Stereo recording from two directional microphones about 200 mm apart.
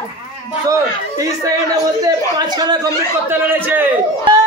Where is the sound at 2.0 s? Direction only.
20° right (ahead or behind).